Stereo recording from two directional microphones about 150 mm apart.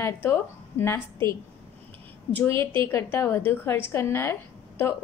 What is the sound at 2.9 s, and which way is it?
A woman's voice, 15° left (ahead or behind).